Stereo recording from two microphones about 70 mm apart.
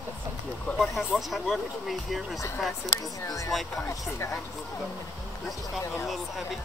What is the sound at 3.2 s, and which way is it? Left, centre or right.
Speech, left.